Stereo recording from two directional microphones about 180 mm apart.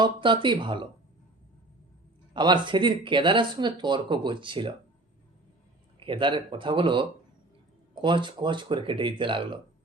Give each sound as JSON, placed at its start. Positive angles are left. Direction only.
{"t": 0.0, "sound": "speech", "side_deg": -25}
{"t": 2.3, "sound": "speech", "side_deg": -25}
{"t": 6.1, "sound": "speech", "side_deg": -25}